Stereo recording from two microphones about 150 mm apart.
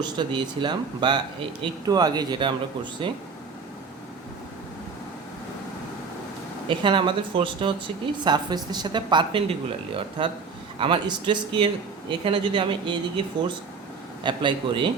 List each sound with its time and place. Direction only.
0.0 s speech: 30° right (ahead or behind)
6.7 s speech: 35° right (ahead or behind)
14.3 s speech: 35° right (ahead or behind)